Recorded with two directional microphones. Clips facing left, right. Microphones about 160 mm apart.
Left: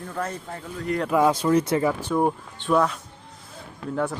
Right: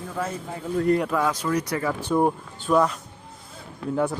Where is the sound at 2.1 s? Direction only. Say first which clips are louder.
Right 1 dB; 5° right (ahead or behind).